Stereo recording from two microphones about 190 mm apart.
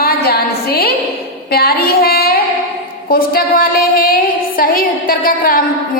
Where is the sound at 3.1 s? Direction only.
50° left (ahead or behind).